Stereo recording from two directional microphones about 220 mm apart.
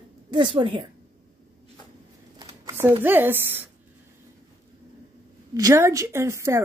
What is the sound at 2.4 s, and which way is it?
Shuffling cards, 10° right (ahead or behind).